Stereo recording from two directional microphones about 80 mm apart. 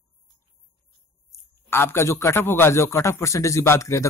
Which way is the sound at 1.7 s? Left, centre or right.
Left.